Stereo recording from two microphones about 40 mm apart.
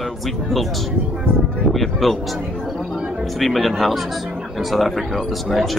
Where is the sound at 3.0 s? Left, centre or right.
Right.